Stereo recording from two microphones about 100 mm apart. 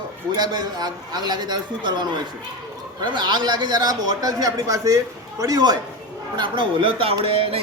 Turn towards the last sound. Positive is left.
turn(degrees=-70)  # may be behind; listen again after turning